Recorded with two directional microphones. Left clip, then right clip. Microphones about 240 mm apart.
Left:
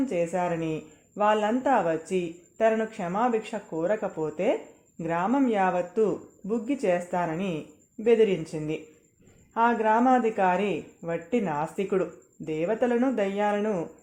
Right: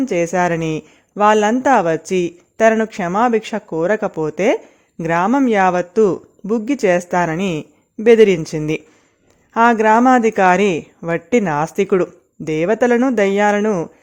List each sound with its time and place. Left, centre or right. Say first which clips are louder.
0.0 s speech: right 10 dB; right